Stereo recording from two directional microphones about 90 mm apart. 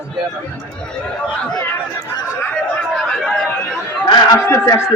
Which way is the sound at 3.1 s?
5° left (ahead or behind).